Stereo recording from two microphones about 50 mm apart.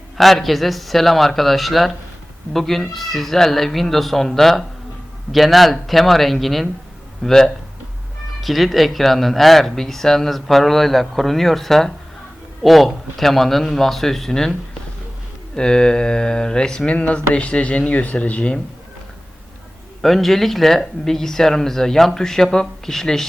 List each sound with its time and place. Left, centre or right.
0.2 s speech: centre
15.5 s speech: centre
20.0 s speech: centre